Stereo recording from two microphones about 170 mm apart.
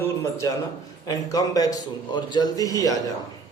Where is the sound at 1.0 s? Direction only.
20° left (ahead or behind).